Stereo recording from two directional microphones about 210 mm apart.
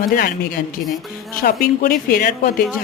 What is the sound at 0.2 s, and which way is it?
Speech, 45° left (ahead or behind).